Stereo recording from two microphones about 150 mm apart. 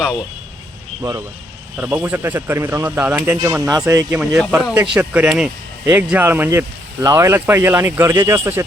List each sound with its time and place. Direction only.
1.0 s speech: 25° right (ahead or behind)
1.7 s speech: 10° right (ahead or behind)
3.4 s speech: 20° right (ahead or behind)
4.1 s speech: 5° right (ahead or behind)